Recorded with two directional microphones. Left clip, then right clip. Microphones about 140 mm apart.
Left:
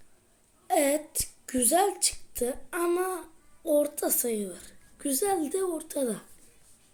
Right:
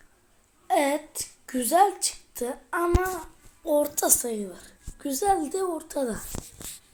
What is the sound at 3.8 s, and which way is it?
A woman's voice, 10° left (ahead or behind).